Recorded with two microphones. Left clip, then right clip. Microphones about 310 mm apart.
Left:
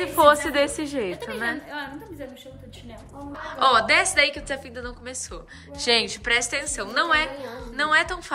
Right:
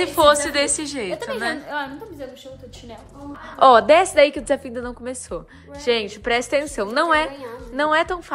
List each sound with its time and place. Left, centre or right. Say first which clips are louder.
0.0 s a woman's voice: right 2 dB; centre
1.7 s a woman's voice: right 6 dB; centre
3.4 s a woman's voice: right 7 dB; centre